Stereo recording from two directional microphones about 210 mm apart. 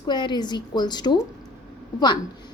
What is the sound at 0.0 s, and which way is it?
A woman's voice, 20° left (ahead or behind).